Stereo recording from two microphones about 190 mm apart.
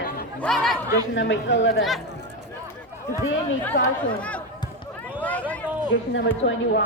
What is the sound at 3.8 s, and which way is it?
Speech, 70° left (ahead or behind).